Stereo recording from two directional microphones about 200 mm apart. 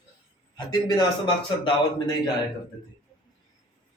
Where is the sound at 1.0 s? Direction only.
20° left (ahead or behind).